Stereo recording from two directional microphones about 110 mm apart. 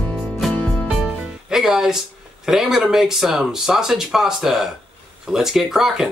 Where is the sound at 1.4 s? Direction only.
5° right (ahead or behind).